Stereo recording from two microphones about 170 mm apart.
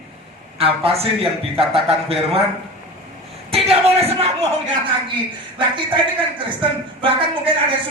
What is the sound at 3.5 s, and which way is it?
Speech, 35° right (ahead or behind).